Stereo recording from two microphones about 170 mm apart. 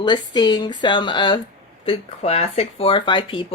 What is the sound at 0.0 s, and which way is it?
A woman's voice, 25° left (ahead or behind).